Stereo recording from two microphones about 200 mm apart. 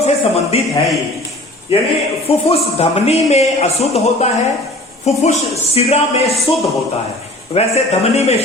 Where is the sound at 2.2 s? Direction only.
30° left (ahead or behind).